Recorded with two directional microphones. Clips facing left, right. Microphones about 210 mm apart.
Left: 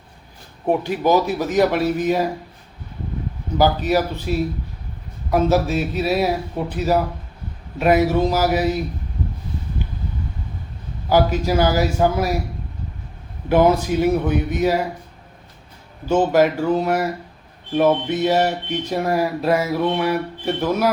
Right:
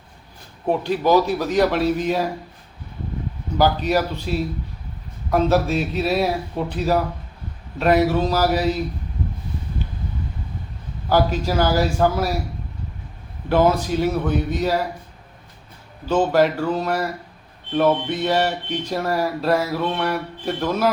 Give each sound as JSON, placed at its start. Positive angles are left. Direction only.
{"t": 0.7, "sound": "speech", "side_deg": 15}
{"t": 3.6, "sound": "a man's voice", "side_deg": 5}
{"t": 3.9, "sound": "speech", "side_deg": 15}
{"t": 5.3, "sound": "a man's voice", "side_deg": 5}
{"t": 11.1, "sound": "speech", "side_deg": 15}
{"t": 13.5, "sound": "speech", "side_deg": 15}
{"t": 16.0, "sound": "speech", "side_deg": 10}